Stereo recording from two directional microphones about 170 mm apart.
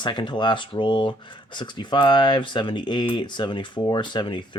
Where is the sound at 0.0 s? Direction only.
25° left (ahead or behind).